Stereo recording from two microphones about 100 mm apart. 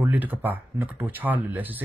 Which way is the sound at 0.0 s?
15° right (ahead or behind).